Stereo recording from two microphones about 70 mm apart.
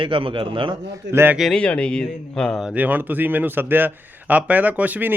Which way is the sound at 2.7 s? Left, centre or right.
Right.